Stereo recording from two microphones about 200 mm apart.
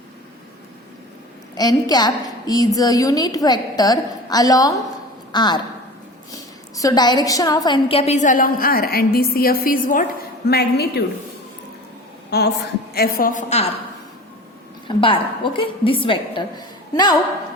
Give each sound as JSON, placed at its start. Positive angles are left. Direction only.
{"t": 1.5, "sound": "a woman's voice", "side_deg": 20}
{"t": 10.5, "sound": "a woman's voice", "side_deg": 55}
{"t": 12.3, "sound": "a woman's voice", "side_deg": 55}
{"t": 14.8, "sound": "a woman's voice", "side_deg": 25}